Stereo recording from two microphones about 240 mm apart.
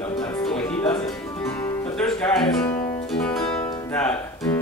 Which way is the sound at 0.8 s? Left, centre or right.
Left.